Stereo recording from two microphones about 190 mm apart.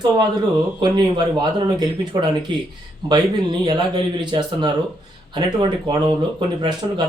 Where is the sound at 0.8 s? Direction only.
25° right (ahead or behind).